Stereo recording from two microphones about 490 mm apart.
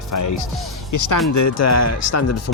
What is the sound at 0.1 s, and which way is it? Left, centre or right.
Speech, left.